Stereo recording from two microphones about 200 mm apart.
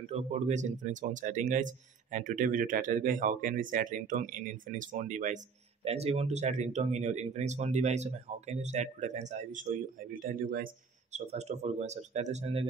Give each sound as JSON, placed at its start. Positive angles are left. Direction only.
{"t": 0.0, "sound": "speech", "side_deg": -30}
{"t": 11.1, "sound": "speech", "side_deg": -35}